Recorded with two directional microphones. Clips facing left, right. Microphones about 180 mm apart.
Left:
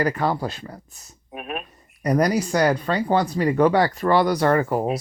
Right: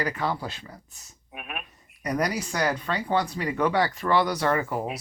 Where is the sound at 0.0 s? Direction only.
45° left (ahead or behind).